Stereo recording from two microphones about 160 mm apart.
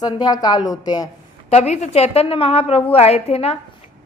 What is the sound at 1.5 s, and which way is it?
A woman's voice, 45° left (ahead or behind).